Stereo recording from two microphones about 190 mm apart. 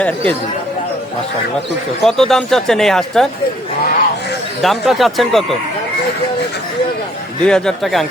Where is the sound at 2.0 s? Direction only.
Centre (ahead or behind).